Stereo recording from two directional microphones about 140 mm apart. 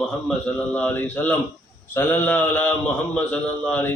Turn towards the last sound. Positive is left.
turn(degrees=10)  # may be behind; listen again after turning